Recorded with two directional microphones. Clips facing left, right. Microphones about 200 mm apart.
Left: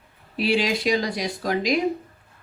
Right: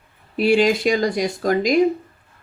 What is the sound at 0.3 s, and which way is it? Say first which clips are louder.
Speech: right 6 dB; 50° right (ahead or behind).